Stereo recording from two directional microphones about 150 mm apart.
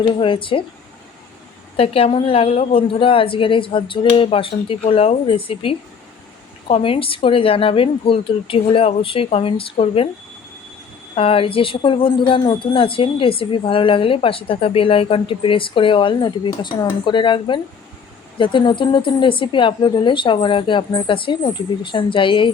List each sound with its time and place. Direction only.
0.0 s speech: 35° left (ahead or behind)
1.7 s speech: 40° left (ahead or behind)
11.1 s speech: 40° left (ahead or behind)